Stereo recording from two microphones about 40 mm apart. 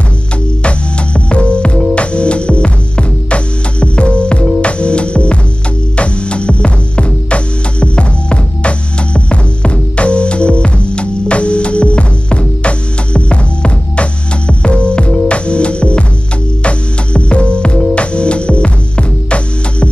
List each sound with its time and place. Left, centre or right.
0.7 s music: left